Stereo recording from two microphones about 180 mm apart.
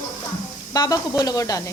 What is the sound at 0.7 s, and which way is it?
Speech, 20° left (ahead or behind).